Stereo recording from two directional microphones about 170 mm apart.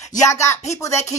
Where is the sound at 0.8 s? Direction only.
15° left (ahead or behind).